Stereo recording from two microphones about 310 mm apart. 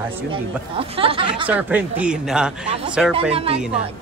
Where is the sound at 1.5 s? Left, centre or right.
Centre.